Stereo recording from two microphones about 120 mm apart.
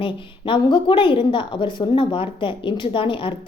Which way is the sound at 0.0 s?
45° left (ahead or behind).